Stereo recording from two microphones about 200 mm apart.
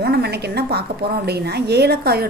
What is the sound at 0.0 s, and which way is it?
A woman's voice, 55° right (ahead or behind).